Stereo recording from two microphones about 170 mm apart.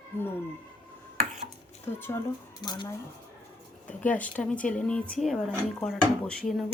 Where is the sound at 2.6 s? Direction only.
25° left (ahead or behind).